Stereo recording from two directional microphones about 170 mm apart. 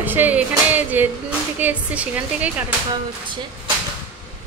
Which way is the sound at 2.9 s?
30° right (ahead or behind).